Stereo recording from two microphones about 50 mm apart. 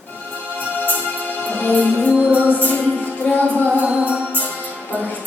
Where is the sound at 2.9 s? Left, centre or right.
Left.